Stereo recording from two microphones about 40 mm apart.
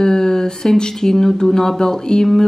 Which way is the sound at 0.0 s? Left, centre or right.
Centre.